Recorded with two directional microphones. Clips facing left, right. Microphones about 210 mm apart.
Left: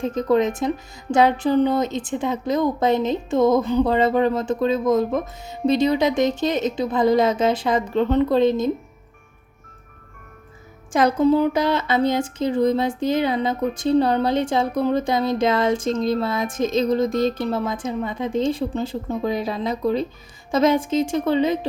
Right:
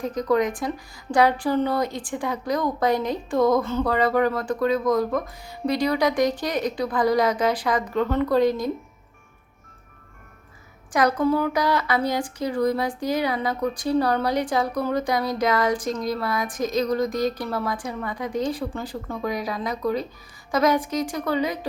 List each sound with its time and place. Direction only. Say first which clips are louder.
0.0 s a woman's voice: left 3 dB; 25° left (ahead or behind)
10.9 s a woman's voice: left 4 dB; 25° left (ahead or behind)